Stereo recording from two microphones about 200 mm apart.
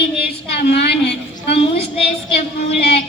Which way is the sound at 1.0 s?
30° left (ahead or behind).